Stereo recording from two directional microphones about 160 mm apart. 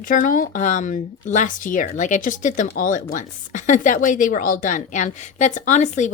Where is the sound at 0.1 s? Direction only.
55° left (ahead or behind).